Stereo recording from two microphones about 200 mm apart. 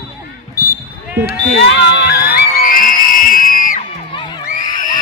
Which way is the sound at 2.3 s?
45° left (ahead or behind).